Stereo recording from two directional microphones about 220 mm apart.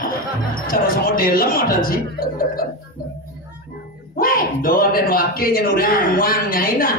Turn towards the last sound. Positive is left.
turn(degrees=40)  # may be behind; listen again after turning